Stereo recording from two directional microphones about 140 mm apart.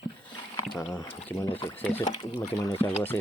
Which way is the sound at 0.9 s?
15° left (ahead or behind).